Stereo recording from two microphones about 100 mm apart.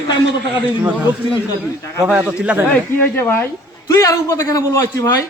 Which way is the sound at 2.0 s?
10° right (ahead or behind).